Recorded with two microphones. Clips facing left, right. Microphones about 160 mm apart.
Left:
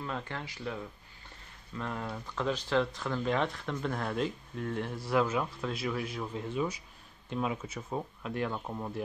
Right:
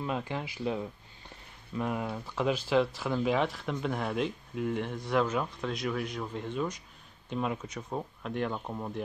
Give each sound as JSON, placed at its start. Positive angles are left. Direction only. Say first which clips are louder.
{"t": 0.0, "sound": "speech", "louder": "right 4 dB", "side_deg": -15}
{"t": 1.8, "sound": "speech", "louder": "right 4 dB", "side_deg": -10}